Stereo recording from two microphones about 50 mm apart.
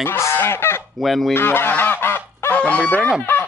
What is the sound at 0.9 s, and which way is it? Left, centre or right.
Goose, centre.